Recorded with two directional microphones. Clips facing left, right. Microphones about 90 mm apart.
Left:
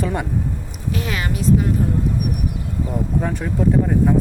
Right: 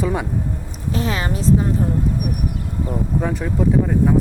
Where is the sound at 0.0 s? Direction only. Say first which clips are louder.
Right 1 dB; 5° right (ahead or behind).